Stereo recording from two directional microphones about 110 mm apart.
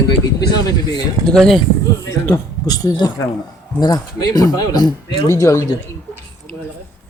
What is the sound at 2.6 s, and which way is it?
Speech, 35° left (ahead or behind).